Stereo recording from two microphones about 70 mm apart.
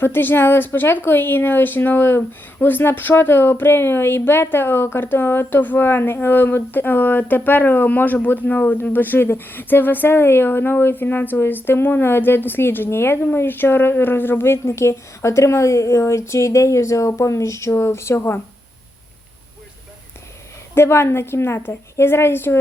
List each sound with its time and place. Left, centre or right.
0.0 s speech: left
20.7 s speech: left